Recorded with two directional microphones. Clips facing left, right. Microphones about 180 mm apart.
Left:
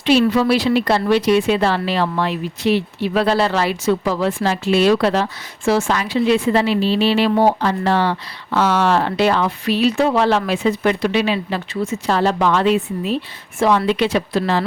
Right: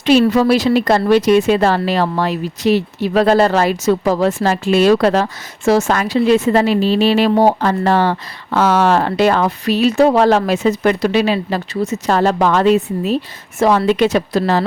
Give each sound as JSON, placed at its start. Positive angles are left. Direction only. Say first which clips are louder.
{"t": 0.0, "sound": "speech", "louder": "right 3 dB", "side_deg": -45}